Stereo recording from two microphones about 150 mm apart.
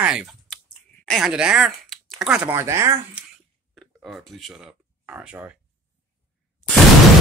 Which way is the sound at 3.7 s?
Centre (ahead or behind).